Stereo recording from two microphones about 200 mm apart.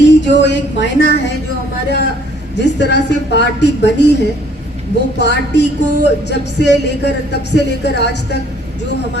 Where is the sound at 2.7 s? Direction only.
60° left (ahead or behind).